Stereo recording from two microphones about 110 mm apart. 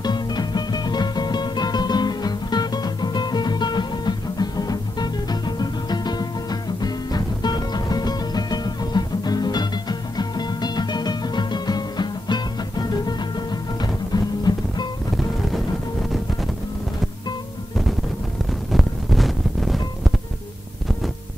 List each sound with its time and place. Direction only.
0.0 s music: 40° left (ahead or behind)
15.1 s music: centre (ahead or behind)
18.5 s wind noise: centre (ahead or behind)